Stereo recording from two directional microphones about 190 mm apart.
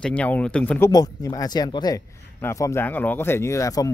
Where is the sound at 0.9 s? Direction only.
20° left (ahead or behind).